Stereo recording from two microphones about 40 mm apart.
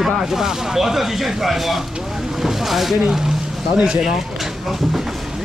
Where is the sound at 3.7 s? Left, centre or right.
Right.